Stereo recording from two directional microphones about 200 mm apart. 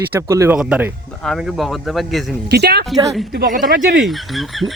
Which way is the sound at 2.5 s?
55° right (ahead or behind).